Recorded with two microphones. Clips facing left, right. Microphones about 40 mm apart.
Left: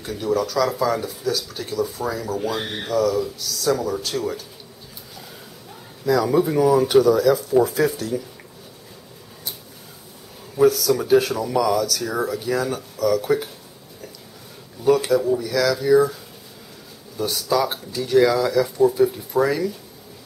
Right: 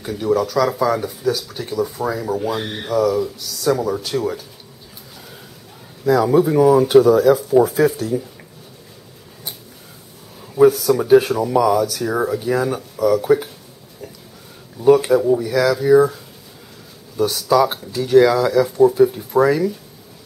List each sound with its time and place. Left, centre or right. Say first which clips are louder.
0.0 s speech: right 4 dB; centre
6.0 s speech: right 4 dB; right
6.3 s speech: right 4 dB; centre
6.9 s speech: right 4 dB; right
10.6 s speech: right 4 dB; right
13.2 s speech: right 5 dB; centre
14.8 s speech: right 5 dB; centre
17.2 s speech: right 5 dB; centre
17.6 s speech: right 7 dB; centre